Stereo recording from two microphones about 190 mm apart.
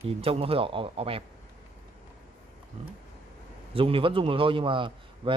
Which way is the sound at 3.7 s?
30° right (ahead or behind).